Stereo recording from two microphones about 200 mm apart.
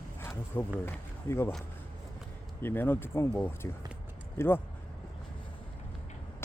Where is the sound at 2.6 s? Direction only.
10° left (ahead or behind).